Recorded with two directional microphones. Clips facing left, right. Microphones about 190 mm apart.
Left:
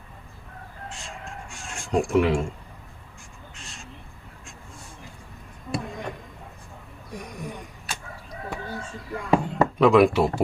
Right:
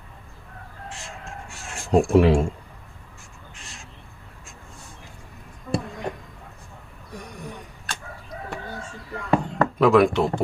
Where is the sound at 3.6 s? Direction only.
Centre (ahead or behind).